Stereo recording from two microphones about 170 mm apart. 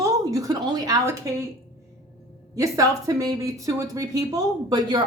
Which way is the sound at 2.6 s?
20° right (ahead or behind).